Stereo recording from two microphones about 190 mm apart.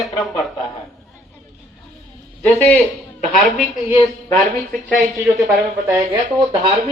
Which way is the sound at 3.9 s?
25° left (ahead or behind).